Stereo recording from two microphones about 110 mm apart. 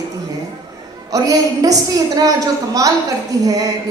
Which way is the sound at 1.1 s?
35° right (ahead or behind).